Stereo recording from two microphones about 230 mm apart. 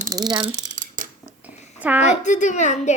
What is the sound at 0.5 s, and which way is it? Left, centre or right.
Mechanisms, right.